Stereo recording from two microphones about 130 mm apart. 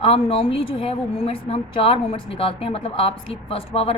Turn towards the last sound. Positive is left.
turn(degrees=50)  # may be behind; listen again after turning